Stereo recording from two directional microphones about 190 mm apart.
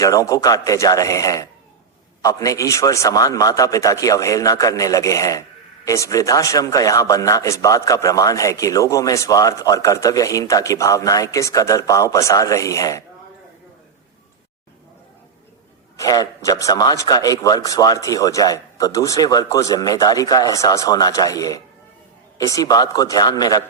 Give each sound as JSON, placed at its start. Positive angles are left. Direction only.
{"t": 0.0, "sound": "a man's voice", "side_deg": 15}
{"t": 16.0, "sound": "a man's voice", "side_deg": 20}